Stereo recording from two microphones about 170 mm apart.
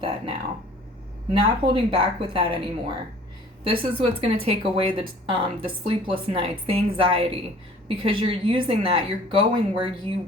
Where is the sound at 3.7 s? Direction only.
35° right (ahead or behind).